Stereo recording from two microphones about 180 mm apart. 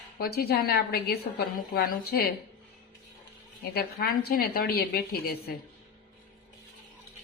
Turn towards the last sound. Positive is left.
turn(degrees=60)  # may be behind; listen again after turning